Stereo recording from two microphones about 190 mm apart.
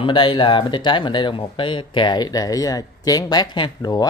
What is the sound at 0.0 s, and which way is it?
Speech, 25° left (ahead or behind).